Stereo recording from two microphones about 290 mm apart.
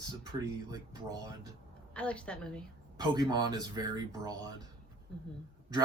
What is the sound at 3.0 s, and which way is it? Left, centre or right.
Speech, centre.